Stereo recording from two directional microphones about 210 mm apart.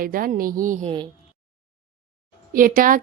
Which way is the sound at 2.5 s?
40° right (ahead or behind).